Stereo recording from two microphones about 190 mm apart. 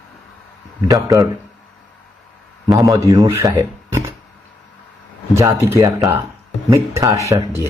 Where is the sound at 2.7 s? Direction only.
20° right (ahead or behind).